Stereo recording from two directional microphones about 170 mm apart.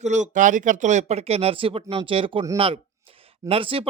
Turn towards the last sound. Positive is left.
turn(degrees=-30)  # may be behind; listen again after turning